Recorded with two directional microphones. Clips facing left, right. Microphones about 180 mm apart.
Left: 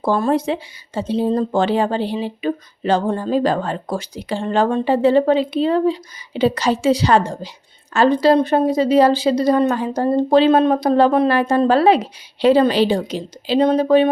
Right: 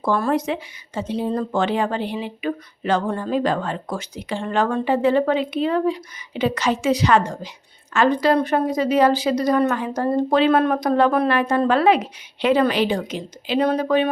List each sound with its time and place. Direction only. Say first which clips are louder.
0.0 s speech: left 3 dB; 30° left (ahead or behind)